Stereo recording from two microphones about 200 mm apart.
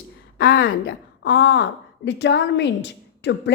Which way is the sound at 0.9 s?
60° left (ahead or behind).